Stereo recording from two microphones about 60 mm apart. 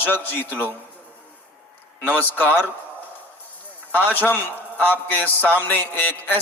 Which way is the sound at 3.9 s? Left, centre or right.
Left.